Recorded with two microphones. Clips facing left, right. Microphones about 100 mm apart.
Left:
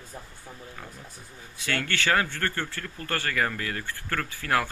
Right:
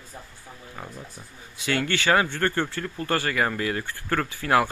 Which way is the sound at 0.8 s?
20° right (ahead or behind).